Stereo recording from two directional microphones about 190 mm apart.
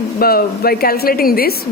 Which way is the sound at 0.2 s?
55° left (ahead or behind).